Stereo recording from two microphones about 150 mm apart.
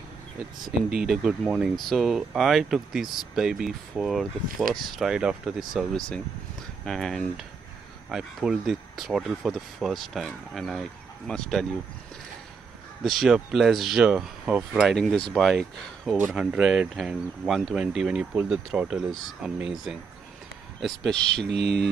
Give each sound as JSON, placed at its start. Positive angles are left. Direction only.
{"t": 1.0, "sound": "speech", "side_deg": 0}
{"t": 13.0, "sound": "speech", "side_deg": 0}
{"t": 16.2, "sound": "speech", "side_deg": -10}
{"t": 21.5, "sound": "speech", "side_deg": -90}